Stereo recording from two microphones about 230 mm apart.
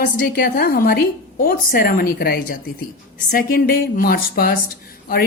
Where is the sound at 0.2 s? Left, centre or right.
Left.